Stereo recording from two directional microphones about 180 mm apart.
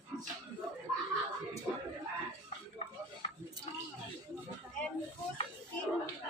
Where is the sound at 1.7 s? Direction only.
5° right (ahead or behind).